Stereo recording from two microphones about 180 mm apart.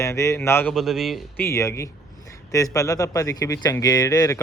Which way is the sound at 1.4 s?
15° left (ahead or behind).